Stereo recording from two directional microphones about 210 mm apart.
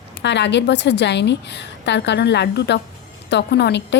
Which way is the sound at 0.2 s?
55° left (ahead or behind).